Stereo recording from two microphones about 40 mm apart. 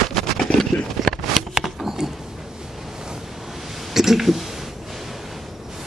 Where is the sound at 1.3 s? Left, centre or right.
Centre.